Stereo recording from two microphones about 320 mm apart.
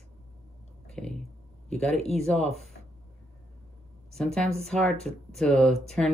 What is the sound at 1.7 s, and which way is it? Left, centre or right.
Speech, centre.